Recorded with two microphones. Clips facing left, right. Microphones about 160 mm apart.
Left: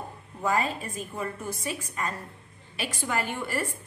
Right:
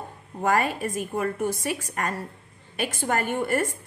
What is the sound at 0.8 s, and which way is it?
A woman's voice, 60° right (ahead or behind).